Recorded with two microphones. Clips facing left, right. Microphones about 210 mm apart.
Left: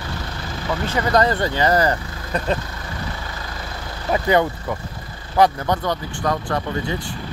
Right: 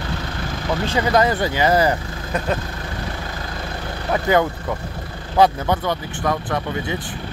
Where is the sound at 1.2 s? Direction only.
15° right (ahead or behind).